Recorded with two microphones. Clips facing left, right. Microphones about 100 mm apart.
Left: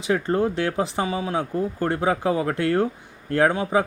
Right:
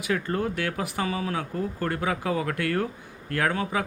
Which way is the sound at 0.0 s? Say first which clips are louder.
Left 5 dB; 30° left (ahead or behind).